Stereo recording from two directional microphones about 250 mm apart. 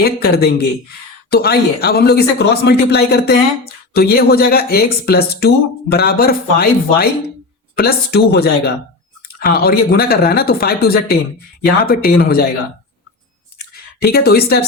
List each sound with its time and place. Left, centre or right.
0.0 s speech: left
14.0 s speech: left